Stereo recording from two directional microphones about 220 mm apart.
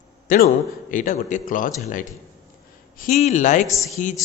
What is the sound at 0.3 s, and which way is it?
A man's voice, 40° left (ahead or behind).